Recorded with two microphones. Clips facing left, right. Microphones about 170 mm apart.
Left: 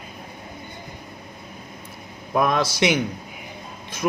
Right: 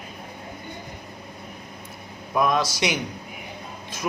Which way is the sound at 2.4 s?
60° left (ahead or behind).